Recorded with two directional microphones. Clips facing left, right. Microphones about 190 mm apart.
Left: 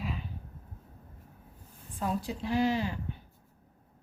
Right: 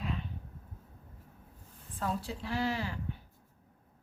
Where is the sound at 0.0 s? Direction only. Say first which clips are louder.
Even; 5° left (ahead or behind).